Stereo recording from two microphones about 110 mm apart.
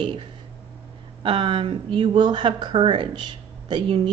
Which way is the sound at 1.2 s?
50° right (ahead or behind).